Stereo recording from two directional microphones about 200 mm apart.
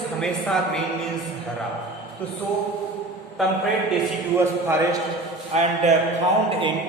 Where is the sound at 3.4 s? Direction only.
Centre (ahead or behind).